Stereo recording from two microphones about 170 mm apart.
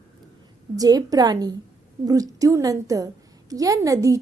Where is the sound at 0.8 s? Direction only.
20° right (ahead or behind).